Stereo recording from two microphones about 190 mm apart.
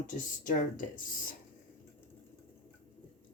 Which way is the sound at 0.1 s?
45° left (ahead or behind).